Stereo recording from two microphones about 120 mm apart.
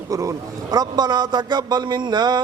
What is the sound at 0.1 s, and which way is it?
A man's voice, 30° right (ahead or behind).